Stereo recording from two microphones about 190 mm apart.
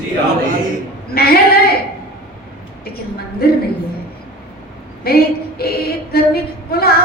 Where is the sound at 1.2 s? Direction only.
55° left (ahead or behind).